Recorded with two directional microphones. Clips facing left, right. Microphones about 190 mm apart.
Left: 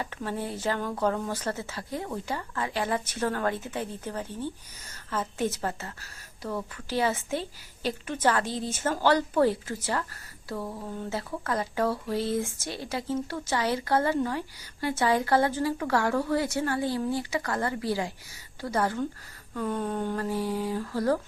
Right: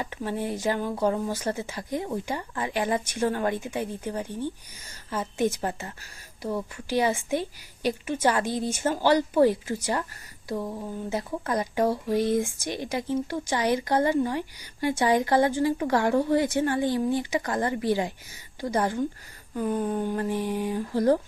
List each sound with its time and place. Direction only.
0.0 s speech: 15° right (ahead or behind)